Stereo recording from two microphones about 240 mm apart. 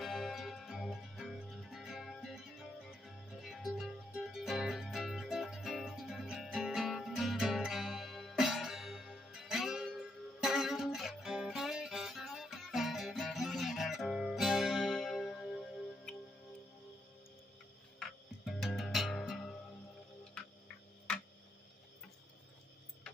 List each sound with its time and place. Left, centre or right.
0.0 s music: centre
17.9 s music: centre